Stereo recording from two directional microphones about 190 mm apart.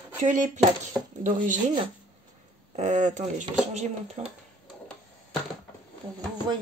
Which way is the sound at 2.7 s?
40° right (ahead or behind).